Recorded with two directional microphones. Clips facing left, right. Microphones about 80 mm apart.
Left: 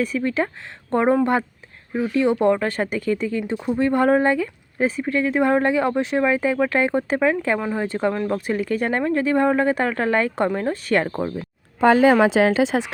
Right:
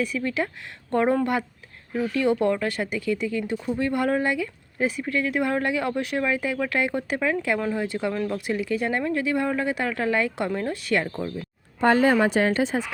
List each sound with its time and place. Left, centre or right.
0.0 s speech: left
12.6 s speech: left